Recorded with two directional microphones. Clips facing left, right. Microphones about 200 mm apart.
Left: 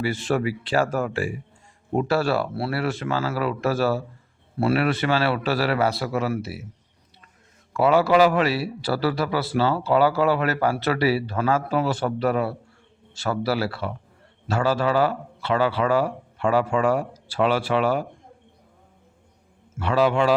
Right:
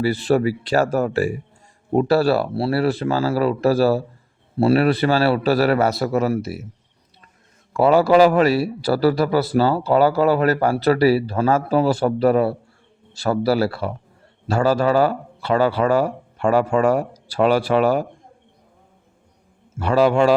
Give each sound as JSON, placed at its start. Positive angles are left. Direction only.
{"t": 0.0, "sound": "a man's voice", "side_deg": -35}
{"t": 7.7, "sound": "a man's voice", "side_deg": -40}
{"t": 19.8, "sound": "speech", "side_deg": -40}